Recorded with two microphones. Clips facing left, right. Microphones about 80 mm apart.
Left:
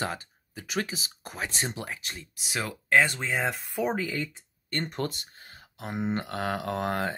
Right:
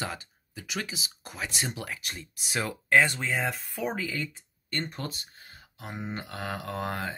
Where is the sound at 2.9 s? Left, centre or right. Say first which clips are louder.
Even; centre.